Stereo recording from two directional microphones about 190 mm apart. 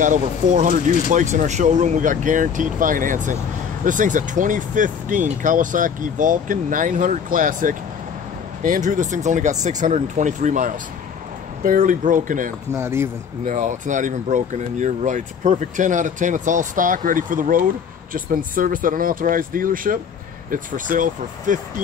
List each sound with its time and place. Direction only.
0.0 s speech: 40° right (ahead or behind)
12.7 s speech: 15° right (ahead or behind)
13.5 s speech: 40° right (ahead or behind)